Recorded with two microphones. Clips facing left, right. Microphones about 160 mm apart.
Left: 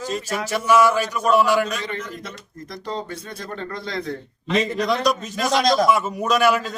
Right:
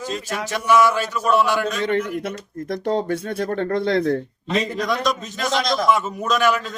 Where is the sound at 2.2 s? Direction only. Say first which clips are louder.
Right 9 dB; 60° right (ahead or behind).